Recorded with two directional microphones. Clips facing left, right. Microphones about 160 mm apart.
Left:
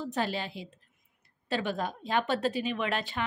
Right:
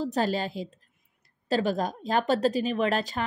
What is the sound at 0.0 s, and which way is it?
A woman's voice, 40° right (ahead or behind).